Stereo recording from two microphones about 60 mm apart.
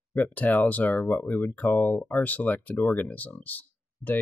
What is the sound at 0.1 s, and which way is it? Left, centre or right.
Speech, left.